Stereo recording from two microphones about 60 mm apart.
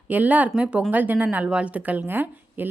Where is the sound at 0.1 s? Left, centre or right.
Right.